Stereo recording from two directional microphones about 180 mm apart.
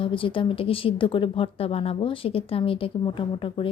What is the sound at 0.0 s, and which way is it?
A woman's voice, 30° left (ahead or behind).